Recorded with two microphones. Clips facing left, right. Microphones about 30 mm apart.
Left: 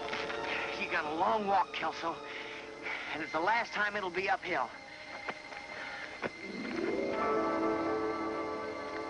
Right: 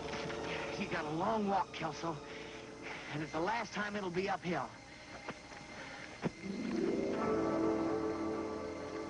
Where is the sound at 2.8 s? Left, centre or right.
Left.